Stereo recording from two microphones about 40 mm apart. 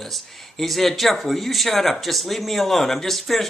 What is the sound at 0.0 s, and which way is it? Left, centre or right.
Speech, centre.